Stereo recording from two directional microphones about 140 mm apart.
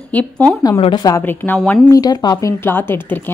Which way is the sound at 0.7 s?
40° left (ahead or behind).